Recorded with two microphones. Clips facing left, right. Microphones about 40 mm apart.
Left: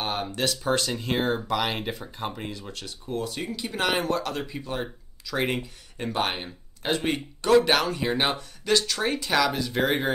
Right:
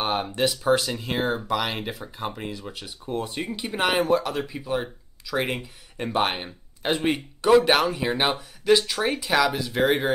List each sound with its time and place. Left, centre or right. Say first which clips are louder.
0.0 s speech: right 4 dB; centre
3.1 s speech: right 2 dB; right
3.8 s speech: right 4 dB; centre